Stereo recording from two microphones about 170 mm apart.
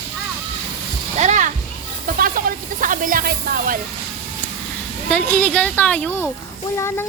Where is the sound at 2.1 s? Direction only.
55° right (ahead or behind).